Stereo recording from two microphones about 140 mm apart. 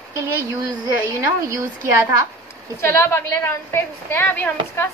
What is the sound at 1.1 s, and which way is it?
Speech, 20° right (ahead or behind).